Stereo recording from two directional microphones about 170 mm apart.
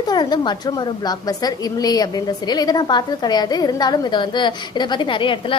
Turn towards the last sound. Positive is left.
turn(degrees=30)  # may be behind; listen again after turning